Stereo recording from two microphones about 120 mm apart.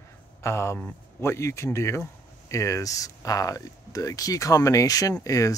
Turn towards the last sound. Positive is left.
turn(degrees=30)  # may be behind; listen again after turning